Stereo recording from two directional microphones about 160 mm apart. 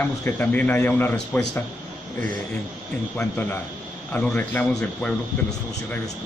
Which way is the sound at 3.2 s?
15° left (ahead or behind).